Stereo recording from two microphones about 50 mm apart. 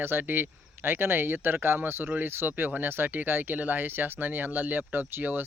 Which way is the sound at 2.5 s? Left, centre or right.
Right.